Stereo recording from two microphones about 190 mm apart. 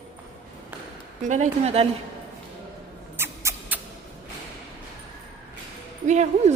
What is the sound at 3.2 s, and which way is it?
Rodents, 10° right (ahead or behind).